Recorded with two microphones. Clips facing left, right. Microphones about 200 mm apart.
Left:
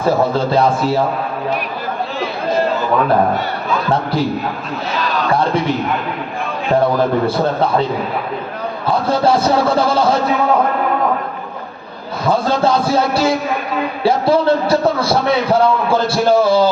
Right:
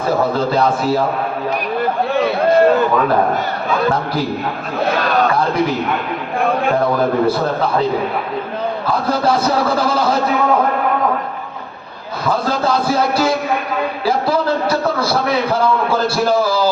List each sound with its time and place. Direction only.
0.0 s a man's voice: 30° left (ahead or behind)
2.1 s chatter: 55° right (ahead or behind)
4.9 s a man's voice: 55° right (ahead or behind)
8.9 s a man's voice: 30° left (ahead or behind)
12.3 s a man's voice: 30° left (ahead or behind)